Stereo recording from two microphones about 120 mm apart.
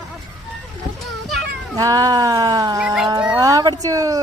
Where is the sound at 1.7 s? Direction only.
30° right (ahead or behind).